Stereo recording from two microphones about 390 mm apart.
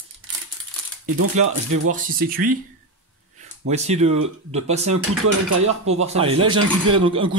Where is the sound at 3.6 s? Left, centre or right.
Centre.